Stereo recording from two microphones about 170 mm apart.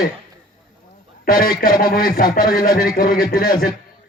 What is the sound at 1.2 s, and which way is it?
A man's voice, 60° left (ahead or behind).